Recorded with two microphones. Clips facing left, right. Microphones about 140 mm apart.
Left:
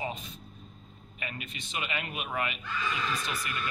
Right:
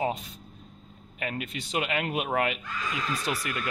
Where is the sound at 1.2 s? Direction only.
80° right.